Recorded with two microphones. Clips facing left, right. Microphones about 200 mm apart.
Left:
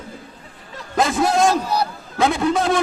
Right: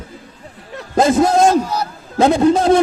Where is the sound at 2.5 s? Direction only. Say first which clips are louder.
Right 6 dB; 25° right (ahead or behind).